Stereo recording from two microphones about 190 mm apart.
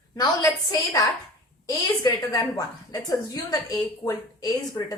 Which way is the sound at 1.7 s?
20° left (ahead or behind).